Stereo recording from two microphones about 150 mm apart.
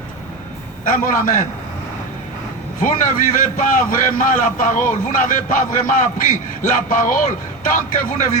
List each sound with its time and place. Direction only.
0.9 s a man's voice: 65° left (ahead or behind)
2.8 s a man's voice: 65° left (ahead or behind)